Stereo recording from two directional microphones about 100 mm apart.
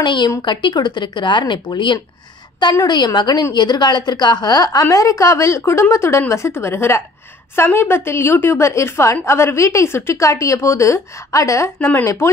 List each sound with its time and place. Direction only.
0.0 s a woman's voice: 50° left (ahead or behind); by 12.3 s 25° left (ahead or behind)